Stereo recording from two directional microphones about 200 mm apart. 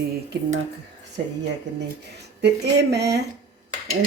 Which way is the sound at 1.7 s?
60° right (ahead or behind).